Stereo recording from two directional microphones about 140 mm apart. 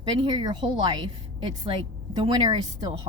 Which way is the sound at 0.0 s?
30° right (ahead or behind).